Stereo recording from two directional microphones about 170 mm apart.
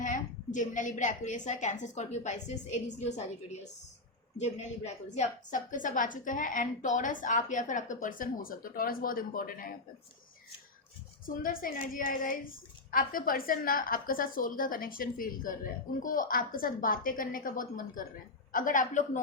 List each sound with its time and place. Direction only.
0.0 s a woman's voice: 50° left (ahead or behind)
4.4 s a woman's voice: 40° left (ahead or behind); by 9.7 s 55° left (ahead or behind)
11.3 s a woman's voice: 55° left (ahead or behind)